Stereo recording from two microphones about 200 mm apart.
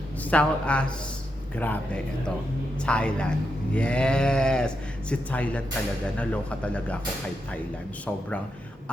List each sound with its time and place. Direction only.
0.3 s speech: 5° left (ahead or behind)